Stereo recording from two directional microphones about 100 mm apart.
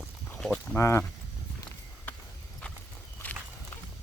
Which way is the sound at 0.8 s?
30° left (ahead or behind).